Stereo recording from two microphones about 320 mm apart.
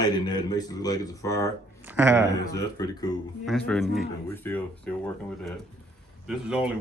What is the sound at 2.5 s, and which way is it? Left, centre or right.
A man's voice, centre.